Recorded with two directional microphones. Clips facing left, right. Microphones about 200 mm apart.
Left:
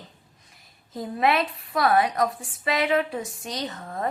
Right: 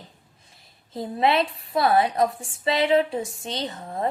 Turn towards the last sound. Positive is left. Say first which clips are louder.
# right 2 dB
turn(degrees=-30)  # may be behind; listen again after turning